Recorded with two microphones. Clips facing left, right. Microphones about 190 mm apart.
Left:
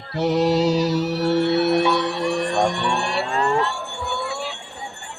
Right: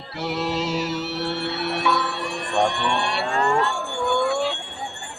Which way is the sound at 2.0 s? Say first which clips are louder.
Left 7 dB; 40° left (ahead or behind).